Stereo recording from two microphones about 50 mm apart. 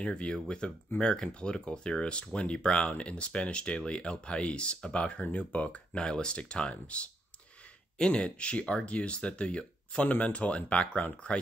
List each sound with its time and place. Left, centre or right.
0.0 s speech: centre